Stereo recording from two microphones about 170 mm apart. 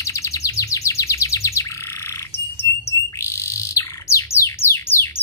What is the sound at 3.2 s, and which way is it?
Bird, 15° left (ahead or behind).